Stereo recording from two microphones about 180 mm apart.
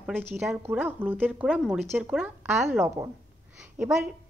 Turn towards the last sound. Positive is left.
turn(degrees=0)  # may be behind; listen again after turning